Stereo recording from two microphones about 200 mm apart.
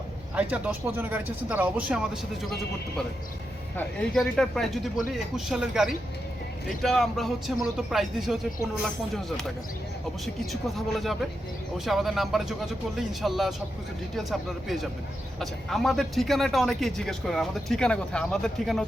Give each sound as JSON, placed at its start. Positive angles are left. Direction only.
{"t": 0.3, "sound": "speech", "side_deg": -5}
{"t": 3.8, "sound": "speech", "side_deg": 5}